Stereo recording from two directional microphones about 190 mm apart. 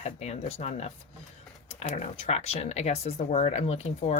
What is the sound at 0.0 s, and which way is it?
Speech, 35° left (ahead or behind).